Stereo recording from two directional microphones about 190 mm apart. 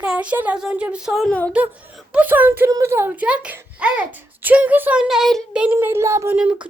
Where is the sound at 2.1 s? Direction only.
10° right (ahead or behind).